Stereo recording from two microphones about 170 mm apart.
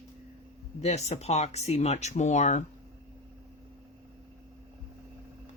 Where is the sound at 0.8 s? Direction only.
40° left (ahead or behind).